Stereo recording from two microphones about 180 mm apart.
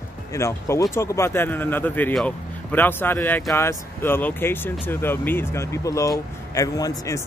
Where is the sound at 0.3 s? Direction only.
15° left (ahead or behind).